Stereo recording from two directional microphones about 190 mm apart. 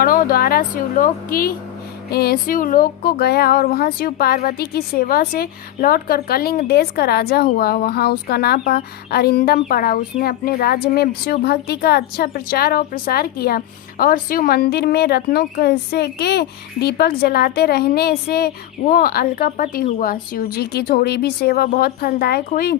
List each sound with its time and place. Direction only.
0.0 s speech: 50° left (ahead or behind)